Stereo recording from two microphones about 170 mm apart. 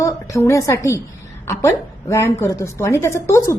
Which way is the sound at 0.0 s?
15° left (ahead or behind).